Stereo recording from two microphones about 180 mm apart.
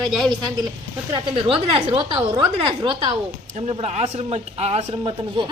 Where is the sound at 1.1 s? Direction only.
30° right (ahead or behind).